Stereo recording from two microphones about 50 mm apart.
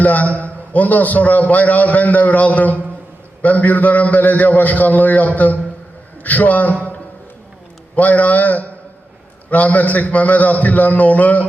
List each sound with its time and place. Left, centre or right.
0.0 s a man's voice: left
7.9 s a man's voice: left